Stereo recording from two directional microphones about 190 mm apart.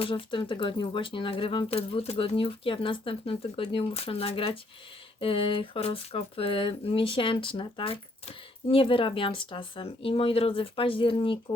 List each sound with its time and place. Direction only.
0.0 s speech: 25° left (ahead or behind)